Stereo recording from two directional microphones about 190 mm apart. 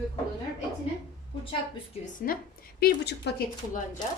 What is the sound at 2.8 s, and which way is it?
Speech, 60° left (ahead or behind).